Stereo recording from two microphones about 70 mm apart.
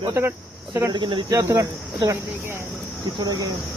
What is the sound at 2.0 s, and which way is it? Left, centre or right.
Speech, right.